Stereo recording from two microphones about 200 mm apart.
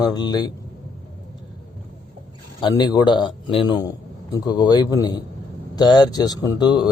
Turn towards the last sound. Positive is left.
turn(degrees=20)  # may be behind; listen again after turning